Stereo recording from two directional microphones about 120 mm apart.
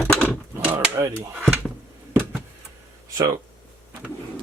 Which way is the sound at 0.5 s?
10° right (ahead or behind).